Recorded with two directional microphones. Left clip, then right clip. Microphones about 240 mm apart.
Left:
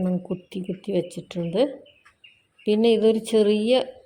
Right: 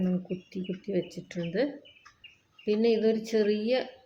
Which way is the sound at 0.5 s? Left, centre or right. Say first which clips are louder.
Left 6 dB; left.